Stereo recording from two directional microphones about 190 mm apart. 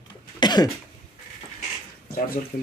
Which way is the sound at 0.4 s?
20° left (ahead or behind).